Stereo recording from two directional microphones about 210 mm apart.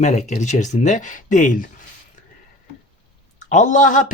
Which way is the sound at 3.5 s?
35° left (ahead or behind).